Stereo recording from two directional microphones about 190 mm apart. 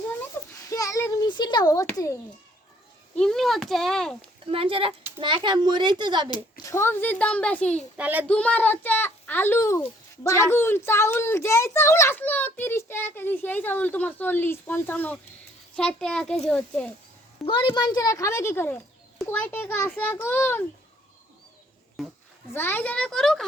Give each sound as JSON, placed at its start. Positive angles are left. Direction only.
{"t": 0.7, "sound": "a sound", "side_deg": 15}
{"t": 3.2, "sound": "a child's voice", "side_deg": 0}
{"t": 4.4, "sound": "a child's voice", "side_deg": -30}
{"t": 6.3, "sound": "a child's voice", "side_deg": 15}
{"t": 7.9, "sound": "a child's voice", "side_deg": -10}
{"t": 8.3, "sound": "a child's voice", "side_deg": 5}
{"t": 17.4, "sound": "a child's voice", "side_deg": 25}
{"t": 22.5, "sound": "a child's voice", "side_deg": 10}